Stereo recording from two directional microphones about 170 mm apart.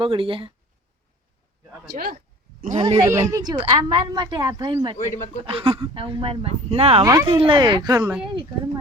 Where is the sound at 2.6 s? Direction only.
40° right (ahead or behind).